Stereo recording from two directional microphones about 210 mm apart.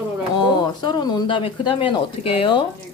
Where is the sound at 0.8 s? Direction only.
25° left (ahead or behind).